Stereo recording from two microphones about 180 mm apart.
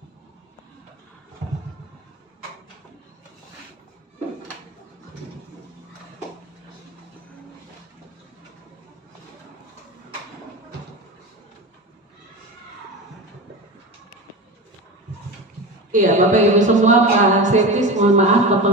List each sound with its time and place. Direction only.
15.9 s speech: 45° right (ahead or behind)